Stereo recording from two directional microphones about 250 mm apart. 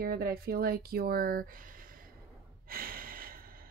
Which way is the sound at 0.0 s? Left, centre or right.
Right.